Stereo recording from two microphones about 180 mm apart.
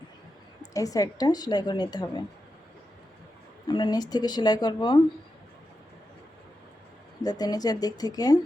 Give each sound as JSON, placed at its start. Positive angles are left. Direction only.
{"t": 0.6, "sound": "a woman's voice", "side_deg": 20}
{"t": 3.7, "sound": "a woman's voice", "side_deg": 25}
{"t": 7.2, "sound": "a woman's voice", "side_deg": 20}